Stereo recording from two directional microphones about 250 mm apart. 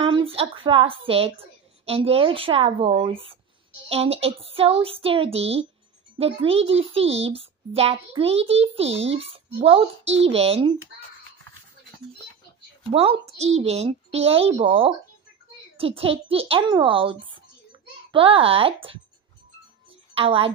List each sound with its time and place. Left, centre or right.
0.0 s a child's voice: right
12.9 s a child's voice: right
20.2 s a child's voice: right